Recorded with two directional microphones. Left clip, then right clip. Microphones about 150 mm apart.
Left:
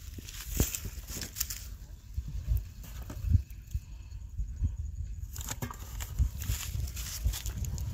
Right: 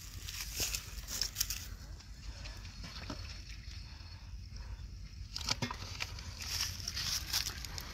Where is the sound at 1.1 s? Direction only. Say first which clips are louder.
Right 2 dB; 25° left (ahead or behind).